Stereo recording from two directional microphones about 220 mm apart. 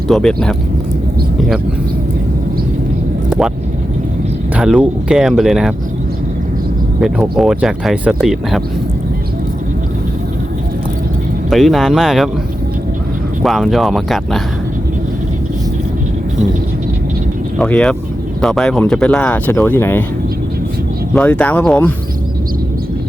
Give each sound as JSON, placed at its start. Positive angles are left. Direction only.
{"t": 0.1, "sound": "speech", "side_deg": 5}
{"t": 4.5, "sound": "speech", "side_deg": -5}
{"t": 7.0, "sound": "speech", "side_deg": 0}
{"t": 11.5, "sound": "speech", "side_deg": 0}
{"t": 13.4, "sound": "speech", "side_deg": 0}
{"t": 17.6, "sound": "speech", "side_deg": 5}
{"t": 21.2, "sound": "speech", "side_deg": 5}